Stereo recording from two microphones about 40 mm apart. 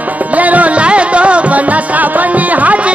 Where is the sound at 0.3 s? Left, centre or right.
Right.